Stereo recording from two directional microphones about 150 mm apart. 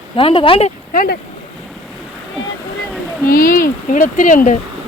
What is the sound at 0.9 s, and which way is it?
Speech, 85° left.